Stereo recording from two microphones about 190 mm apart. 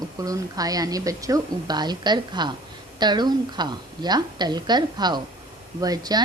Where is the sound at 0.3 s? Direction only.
20° right (ahead or behind).